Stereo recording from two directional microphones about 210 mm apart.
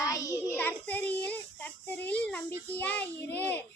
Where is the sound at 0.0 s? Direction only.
15° left (ahead or behind).